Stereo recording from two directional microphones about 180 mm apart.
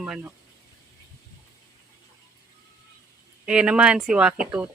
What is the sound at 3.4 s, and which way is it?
Speech, 5° right (ahead or behind).